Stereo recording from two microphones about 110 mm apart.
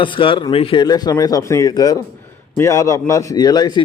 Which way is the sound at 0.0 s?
50° left (ahead or behind).